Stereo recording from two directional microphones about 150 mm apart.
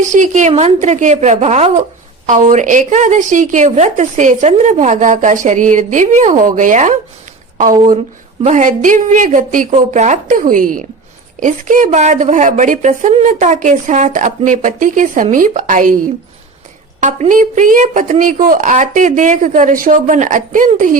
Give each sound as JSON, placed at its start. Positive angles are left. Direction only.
{"t": 0.0, "sound": "a woman's voice", "side_deg": -55}
{"t": 8.4, "sound": "a woman's voice", "side_deg": -55}
{"t": 17.0, "sound": "a woman's voice", "side_deg": -55}